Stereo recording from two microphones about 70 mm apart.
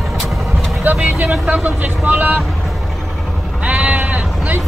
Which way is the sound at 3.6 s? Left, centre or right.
Centre.